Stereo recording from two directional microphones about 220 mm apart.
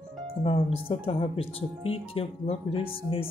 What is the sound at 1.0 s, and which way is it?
Speech, 25° left (ahead or behind).